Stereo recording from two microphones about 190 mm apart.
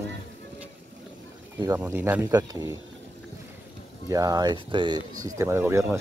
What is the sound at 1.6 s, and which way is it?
Speech, 15° right (ahead or behind).